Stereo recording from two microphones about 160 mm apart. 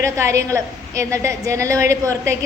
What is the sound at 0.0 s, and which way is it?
A woman's voice, 20° right (ahead or behind).